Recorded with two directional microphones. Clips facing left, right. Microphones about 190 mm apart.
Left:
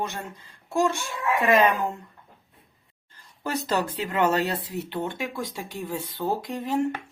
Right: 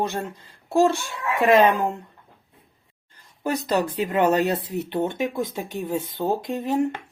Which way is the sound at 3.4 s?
15° right (ahead or behind).